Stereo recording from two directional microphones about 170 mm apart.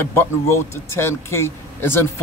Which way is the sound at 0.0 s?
15° left (ahead or behind).